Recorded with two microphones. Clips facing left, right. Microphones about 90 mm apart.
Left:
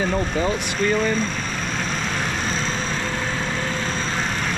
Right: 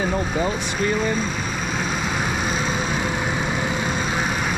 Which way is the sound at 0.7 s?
10° right (ahead or behind).